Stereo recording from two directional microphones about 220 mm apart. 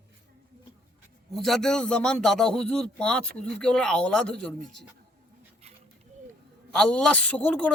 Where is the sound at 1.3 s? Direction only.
Centre (ahead or behind).